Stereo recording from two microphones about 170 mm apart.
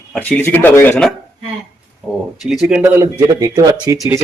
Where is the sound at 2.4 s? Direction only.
Centre (ahead or behind).